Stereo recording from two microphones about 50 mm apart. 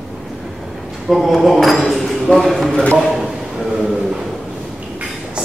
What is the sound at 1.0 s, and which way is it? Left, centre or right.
Speech, centre.